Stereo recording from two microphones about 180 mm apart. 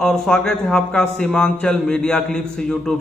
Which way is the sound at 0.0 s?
5° left (ahead or behind).